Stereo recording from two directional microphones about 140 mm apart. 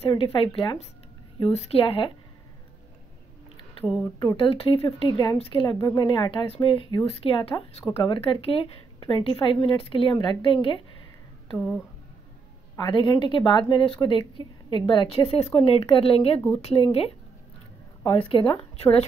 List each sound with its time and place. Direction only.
0.0 s a woman's voice: 40° left (ahead or behind)
4.2 s a woman's voice: 40° left (ahead or behind)
11.5 s speech: centre (ahead or behind)
12.7 s a woman's voice: 35° left (ahead or behind)